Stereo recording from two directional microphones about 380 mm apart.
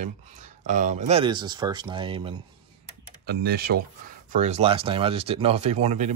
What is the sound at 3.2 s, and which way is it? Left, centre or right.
Speech, right.